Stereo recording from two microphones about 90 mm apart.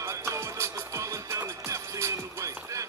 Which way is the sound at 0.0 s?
35° right (ahead or behind).